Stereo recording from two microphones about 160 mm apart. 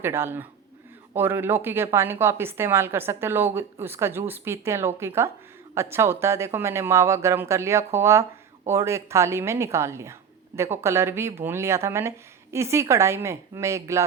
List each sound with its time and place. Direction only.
0.0 s speech: 15° right (ahead or behind)